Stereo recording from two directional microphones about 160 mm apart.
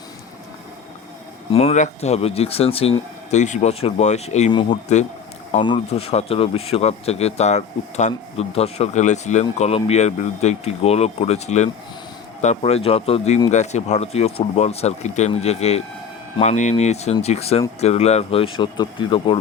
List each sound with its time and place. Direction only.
1.5 s speech: 40° left (ahead or behind)
5.6 s speech: 35° left (ahead or behind)